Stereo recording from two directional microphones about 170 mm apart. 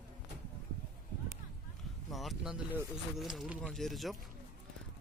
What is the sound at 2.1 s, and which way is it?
A man's voice, centre (ahead or behind).